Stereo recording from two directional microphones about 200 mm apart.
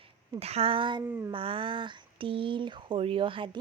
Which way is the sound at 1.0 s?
10° right (ahead or behind).